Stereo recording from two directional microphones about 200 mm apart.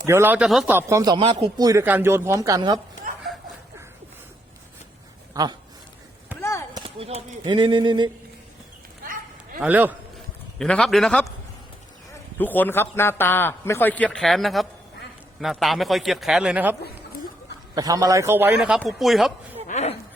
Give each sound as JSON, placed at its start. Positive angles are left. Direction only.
{"t": 0.0, "sound": "speech", "side_deg": -10}
{"t": 0.8, "sound": "speech", "side_deg": -15}
{"t": 5.3, "sound": "speech", "side_deg": -20}
{"t": 6.7, "sound": "speech", "side_deg": -30}
{"t": 9.6, "sound": "speech", "side_deg": -10}
{"t": 10.6, "sound": "a man's voice", "side_deg": 5}
{"t": 12.4, "sound": "a man's voice", "side_deg": 10}
{"t": 17.7, "sound": "a man's voice", "side_deg": -20}
{"t": 19.6, "sound": "a sound", "side_deg": 35}